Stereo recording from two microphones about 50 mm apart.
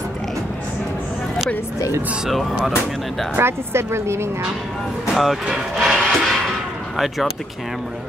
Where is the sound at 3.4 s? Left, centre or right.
Right.